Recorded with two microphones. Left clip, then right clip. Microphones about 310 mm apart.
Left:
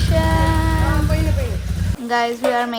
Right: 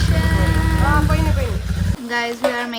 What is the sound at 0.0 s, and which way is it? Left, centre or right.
Music, centre.